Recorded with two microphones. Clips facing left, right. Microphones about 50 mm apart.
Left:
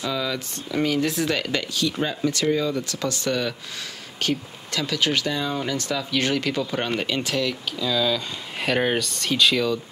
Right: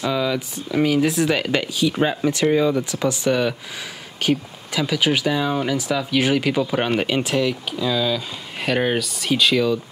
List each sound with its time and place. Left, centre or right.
0.0 s speech: centre
1.3 s speech: centre
2.0 s speech: right; by 9.8 s centre